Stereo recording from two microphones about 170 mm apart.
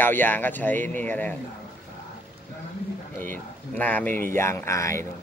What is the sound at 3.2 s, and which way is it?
Speech, 10° left (ahead or behind).